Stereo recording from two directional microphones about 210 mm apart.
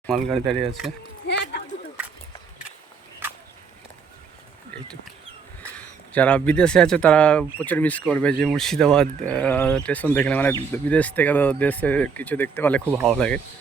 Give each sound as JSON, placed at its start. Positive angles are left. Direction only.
{"t": 0.1, "sound": "speech", "side_deg": 5}
{"t": 1.3, "sound": "a sound", "side_deg": 55}
{"t": 5.7, "sound": "speech", "side_deg": 5}